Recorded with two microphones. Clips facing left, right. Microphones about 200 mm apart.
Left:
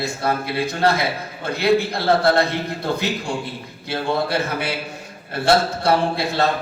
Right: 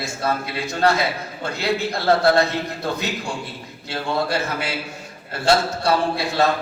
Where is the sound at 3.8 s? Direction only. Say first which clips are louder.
Left 2 dB; 55° left (ahead or behind).